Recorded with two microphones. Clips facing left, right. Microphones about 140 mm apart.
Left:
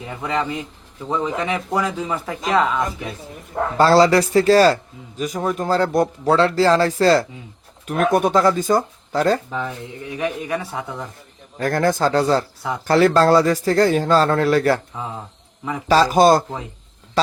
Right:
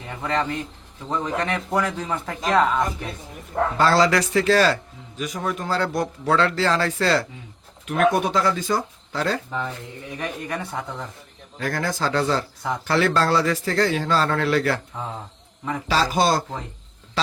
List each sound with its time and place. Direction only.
0.2 s a man's voice: 10° left (ahead or behind)
3.8 s a man's voice: 35° left (ahead or behind)
10.1 s speech: 5° left (ahead or behind)
11.6 s a man's voice: 50° left (ahead or behind)
15.9 s speech: 45° left (ahead or behind)
17.2 s a sound: 40° left (ahead or behind)